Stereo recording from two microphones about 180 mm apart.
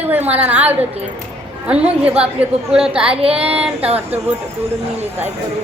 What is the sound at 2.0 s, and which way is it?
A woman's voice, 5° right (ahead or behind).